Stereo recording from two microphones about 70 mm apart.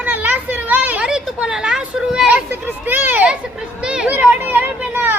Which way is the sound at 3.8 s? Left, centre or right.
Centre.